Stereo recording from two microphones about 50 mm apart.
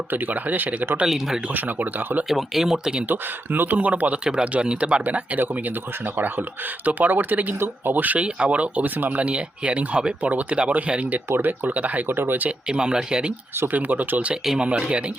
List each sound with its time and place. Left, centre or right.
0.1 s speech: right
1.0 s speech: centre
1.5 s speech: right
2.3 s speech: centre
3.1 s speech: right
4.2 s speech: centre; by 8.2 s right
8.2 s speech: right
9.2 s speech: right
11.3 s speech: right
12.0 s speech: right
12.5 s speech: centre
13.6 s speech: right